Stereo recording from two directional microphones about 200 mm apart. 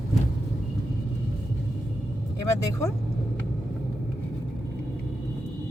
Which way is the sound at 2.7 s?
15° left (ahead or behind).